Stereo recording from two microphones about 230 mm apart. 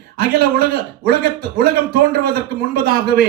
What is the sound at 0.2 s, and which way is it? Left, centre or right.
A man's voice, right.